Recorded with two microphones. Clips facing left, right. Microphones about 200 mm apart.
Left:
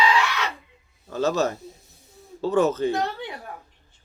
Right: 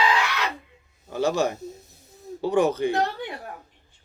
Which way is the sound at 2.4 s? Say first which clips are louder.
Left 1 dB; 15° right (ahead or behind).